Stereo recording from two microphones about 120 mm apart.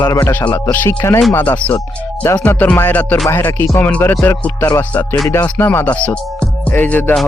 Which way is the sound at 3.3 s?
20° left (ahead or behind).